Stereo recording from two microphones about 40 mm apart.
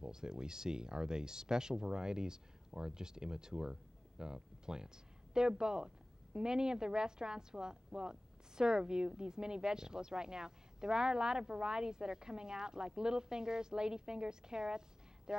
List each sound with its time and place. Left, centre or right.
0.0 s a woman's voice: centre